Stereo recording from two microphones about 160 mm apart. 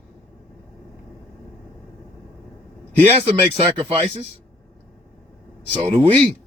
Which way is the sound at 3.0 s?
35° right (ahead or behind).